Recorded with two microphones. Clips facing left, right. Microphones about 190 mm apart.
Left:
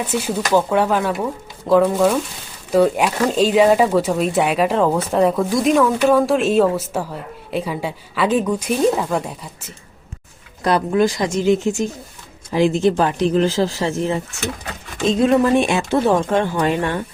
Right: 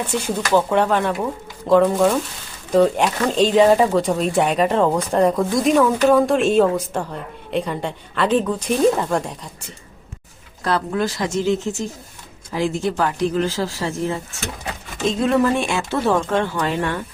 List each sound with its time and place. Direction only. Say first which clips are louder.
0.0 s speech: left 1 dB; 5° left (ahead or behind)
10.6 s speech: left 5 dB; 15° left (ahead or behind)
15.5 s speech: left 5 dB; 20° left (ahead or behind)